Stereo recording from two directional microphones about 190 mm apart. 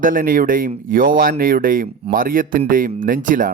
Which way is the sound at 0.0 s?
45° right (ahead or behind).